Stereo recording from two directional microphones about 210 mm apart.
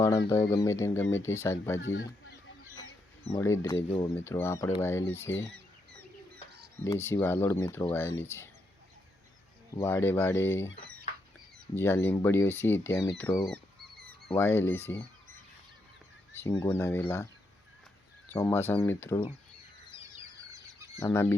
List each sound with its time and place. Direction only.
0.5 s speech: 15° left (ahead or behind)
1.8 s speech: 65° left (ahead or behind)
3.3 s speech: 15° left (ahead or behind)
5.5 s chicken: 50° right (ahead or behind)
6.8 s speech: 10° left (ahead or behind)
9.8 s speech: 10° left (ahead or behind)
10.8 s fowl: 50° right (ahead or behind)
11.7 s speech: 10° left (ahead or behind)
16.3 s fowl: 10° left (ahead or behind)
16.6 s speech: 10° left (ahead or behind)
18.3 s speech: 10° left (ahead or behind)
20.5 s a sound: 15° right (ahead or behind)
21.0 s speech: 10° left (ahead or behind)